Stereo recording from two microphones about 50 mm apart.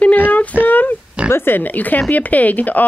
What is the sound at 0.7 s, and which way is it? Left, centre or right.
Pig, left.